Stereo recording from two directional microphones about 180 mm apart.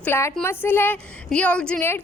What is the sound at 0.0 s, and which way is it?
A woman's voice, 15° left (ahead or behind).